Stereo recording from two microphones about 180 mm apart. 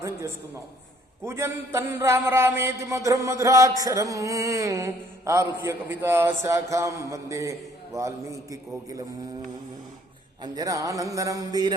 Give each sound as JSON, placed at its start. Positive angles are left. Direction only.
{"t": 1.2, "sound": "a sound", "side_deg": -15}
{"t": 7.9, "sound": "a man's voice", "side_deg": -15}
{"t": 10.4, "sound": "a man's voice", "side_deg": -20}